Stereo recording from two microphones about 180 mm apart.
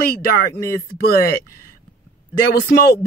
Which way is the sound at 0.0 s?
55° left (ahead or behind).